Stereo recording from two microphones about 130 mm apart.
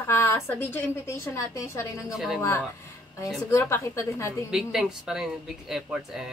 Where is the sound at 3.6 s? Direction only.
20° left (ahead or behind).